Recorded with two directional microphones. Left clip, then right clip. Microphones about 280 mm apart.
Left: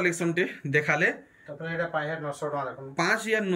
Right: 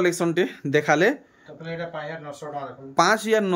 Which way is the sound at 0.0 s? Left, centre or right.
Centre.